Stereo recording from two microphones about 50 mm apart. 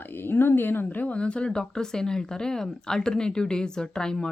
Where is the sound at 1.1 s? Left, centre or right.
Left.